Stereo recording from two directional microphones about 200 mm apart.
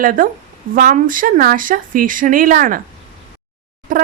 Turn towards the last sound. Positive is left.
turn(degrees=-40)  # may be behind; listen again after turning